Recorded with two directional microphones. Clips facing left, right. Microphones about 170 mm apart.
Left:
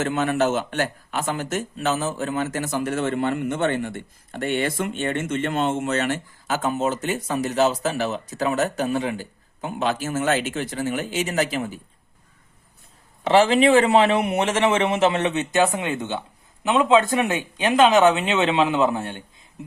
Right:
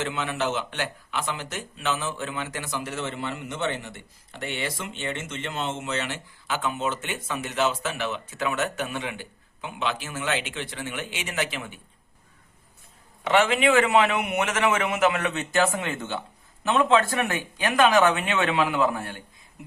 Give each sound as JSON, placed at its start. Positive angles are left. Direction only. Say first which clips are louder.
{"t": 0.0, "sound": "speech", "louder": "left 7 dB", "side_deg": 45}
{"t": 13.2, "sound": "a man's voice", "louder": "left 5 dB", "side_deg": 30}